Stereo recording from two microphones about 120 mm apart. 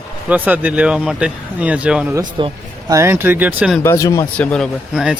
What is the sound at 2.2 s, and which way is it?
Speech, 45° right (ahead or behind).